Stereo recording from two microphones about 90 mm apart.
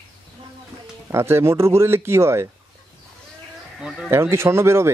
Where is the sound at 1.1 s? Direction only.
30° right (ahead or behind).